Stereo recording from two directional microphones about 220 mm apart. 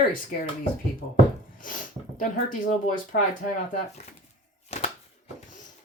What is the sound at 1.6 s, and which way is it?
Speech, 35° left (ahead or behind).